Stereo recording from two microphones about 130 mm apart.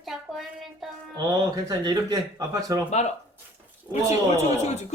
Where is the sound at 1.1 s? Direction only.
30° right (ahead or behind).